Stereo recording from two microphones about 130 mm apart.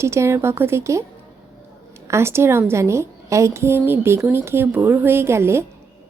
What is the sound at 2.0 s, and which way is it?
A woman's voice, 20° right (ahead or behind).